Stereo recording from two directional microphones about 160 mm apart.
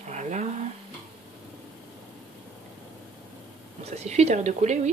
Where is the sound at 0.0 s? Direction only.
45° right (ahead or behind).